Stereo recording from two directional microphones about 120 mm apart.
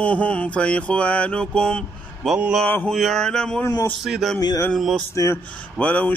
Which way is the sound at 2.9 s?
Centre (ahead or behind).